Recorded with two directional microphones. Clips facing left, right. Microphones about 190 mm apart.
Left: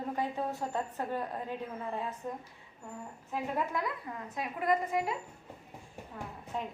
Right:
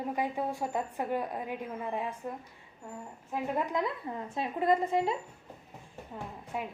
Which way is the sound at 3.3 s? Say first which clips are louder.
Right 2 dB; 15° right (ahead or behind).